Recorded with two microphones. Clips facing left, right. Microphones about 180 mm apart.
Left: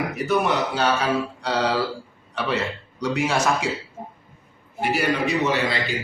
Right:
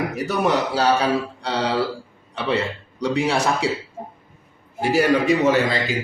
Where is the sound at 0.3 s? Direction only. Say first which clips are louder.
Even; 40° right (ahead or behind).